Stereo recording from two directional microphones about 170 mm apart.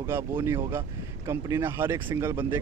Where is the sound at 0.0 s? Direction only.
15° right (ahead or behind).